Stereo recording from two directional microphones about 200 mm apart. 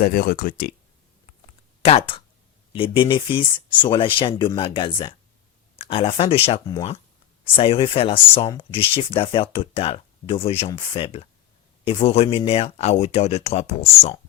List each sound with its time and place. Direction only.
0.0 s speech: 45° left (ahead or behind)
1.8 s speech: 30° left (ahead or behind)